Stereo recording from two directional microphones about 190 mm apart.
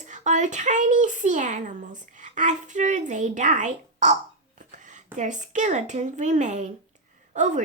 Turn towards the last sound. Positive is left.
turn(degrees=-40)  # may be behind; listen again after turning